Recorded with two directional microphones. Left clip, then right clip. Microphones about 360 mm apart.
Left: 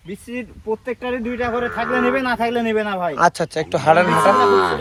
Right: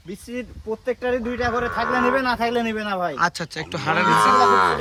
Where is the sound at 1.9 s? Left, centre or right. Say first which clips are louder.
Left 2 dB; centre.